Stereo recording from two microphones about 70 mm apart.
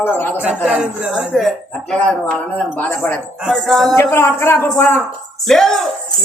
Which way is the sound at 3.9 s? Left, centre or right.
Left.